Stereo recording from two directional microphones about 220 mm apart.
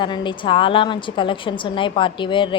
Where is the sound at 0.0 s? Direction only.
20° left (ahead or behind).